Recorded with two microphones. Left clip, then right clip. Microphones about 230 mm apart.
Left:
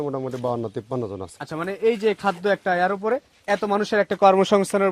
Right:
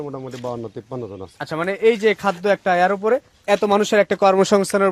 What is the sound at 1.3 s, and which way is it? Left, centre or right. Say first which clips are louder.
Speech: right 8 dB; centre.